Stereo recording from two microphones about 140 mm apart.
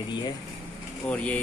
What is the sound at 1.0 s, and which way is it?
Speech, 10° left (ahead or behind).